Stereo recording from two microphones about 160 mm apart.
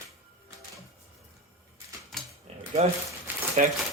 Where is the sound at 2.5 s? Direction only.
40° right (ahead or behind).